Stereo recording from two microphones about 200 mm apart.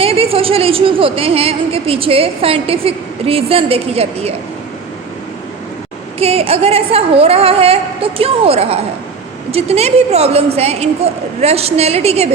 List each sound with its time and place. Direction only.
0.0 s a woman's voice: 30° right (ahead or behind)
6.1 s a woman's voice: 30° right (ahead or behind)